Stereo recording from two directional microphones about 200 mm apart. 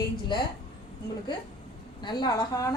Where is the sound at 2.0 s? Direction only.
20° left (ahead or behind).